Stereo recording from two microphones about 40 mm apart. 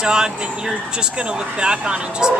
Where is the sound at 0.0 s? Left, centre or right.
Centre.